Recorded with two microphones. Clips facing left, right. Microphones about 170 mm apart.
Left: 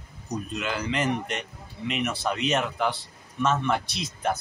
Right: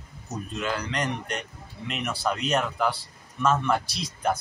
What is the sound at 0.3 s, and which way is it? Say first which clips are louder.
Speech: even; centre (ahead or behind).